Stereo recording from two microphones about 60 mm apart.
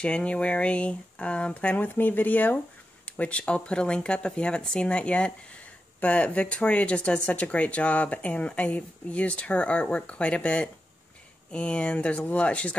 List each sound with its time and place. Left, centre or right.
0.0 s speech: centre